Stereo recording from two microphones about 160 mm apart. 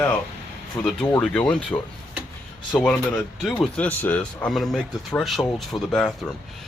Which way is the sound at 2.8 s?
5° left (ahead or behind).